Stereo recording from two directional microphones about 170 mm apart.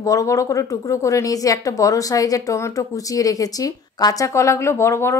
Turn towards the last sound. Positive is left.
turn(degrees=15)  # may be behind; listen again after turning